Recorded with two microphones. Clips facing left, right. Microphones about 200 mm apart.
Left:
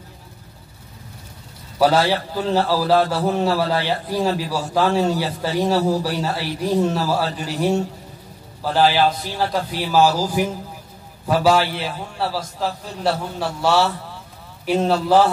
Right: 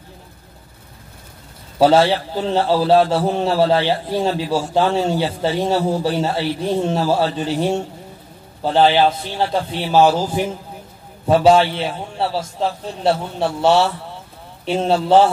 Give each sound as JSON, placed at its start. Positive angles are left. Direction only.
{"t": 1.8, "sound": "a man's voice", "side_deg": -25}
{"t": 8.7, "sound": "a man's voice", "side_deg": -25}